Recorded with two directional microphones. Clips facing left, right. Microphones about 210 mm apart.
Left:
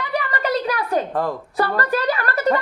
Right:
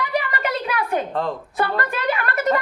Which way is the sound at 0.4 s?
35° left (ahead or behind).